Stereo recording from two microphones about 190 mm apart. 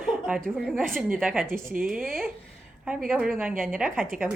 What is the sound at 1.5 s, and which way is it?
Speech, 45° right (ahead or behind).